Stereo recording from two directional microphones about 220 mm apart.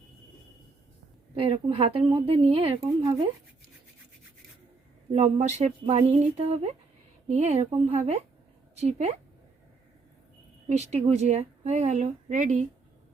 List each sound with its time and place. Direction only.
1.4 s a woman's voice: 25° right (ahead or behind)
5.1 s a woman's voice: 30° right (ahead or behind)
10.7 s a woman's voice: 30° right (ahead or behind)